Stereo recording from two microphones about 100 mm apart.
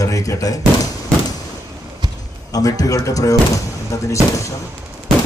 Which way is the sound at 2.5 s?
35° left (ahead or behind).